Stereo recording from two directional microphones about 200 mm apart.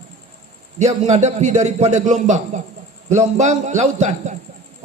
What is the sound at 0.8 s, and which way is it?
A man's voice, 35° right (ahead or behind).